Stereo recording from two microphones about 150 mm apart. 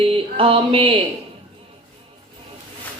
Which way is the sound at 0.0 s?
35° right (ahead or behind).